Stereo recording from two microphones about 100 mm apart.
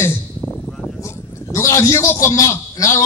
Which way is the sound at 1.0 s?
30° left (ahead or behind).